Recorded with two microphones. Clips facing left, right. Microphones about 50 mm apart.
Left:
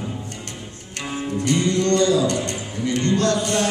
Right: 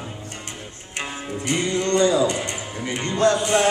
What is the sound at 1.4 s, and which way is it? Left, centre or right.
Music, centre.